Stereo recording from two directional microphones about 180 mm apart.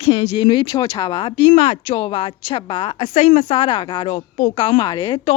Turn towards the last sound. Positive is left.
turn(degrees=30)  # may be behind; listen again after turning